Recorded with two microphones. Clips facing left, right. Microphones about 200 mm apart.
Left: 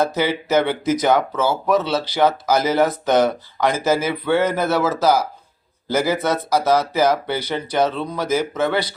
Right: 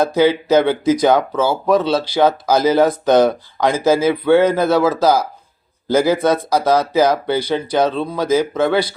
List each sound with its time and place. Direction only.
0.0 s speech: 15° right (ahead or behind)